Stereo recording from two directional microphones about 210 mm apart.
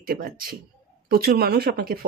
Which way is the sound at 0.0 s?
45° right (ahead or behind).